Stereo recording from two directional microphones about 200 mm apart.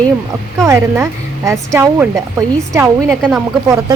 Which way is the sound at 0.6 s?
15° right (ahead or behind).